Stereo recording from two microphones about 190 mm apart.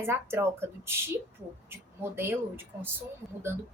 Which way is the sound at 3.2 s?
Centre (ahead or behind).